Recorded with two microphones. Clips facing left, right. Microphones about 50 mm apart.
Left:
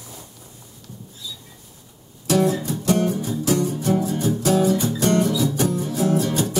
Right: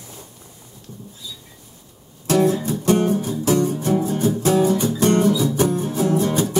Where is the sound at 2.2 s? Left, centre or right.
Right.